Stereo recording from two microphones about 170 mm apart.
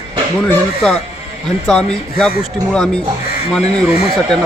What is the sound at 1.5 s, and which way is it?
A man's voice, 5° left (ahead or behind).